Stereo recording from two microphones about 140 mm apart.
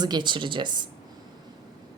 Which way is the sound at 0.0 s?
30° right (ahead or behind).